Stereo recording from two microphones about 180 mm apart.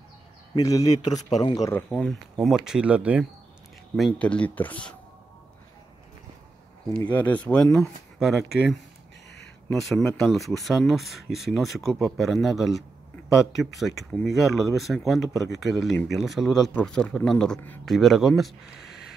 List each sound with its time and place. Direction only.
0.6 s a man's voice: 20° left (ahead or behind)
1.7 s speech: 10° left (ahead or behind); by 3.3 s 5° right (ahead or behind)
3.9 s speech: 5° left (ahead or behind)
7.2 s speech: 10° left (ahead or behind)
9.7 s speech: centre (ahead or behind)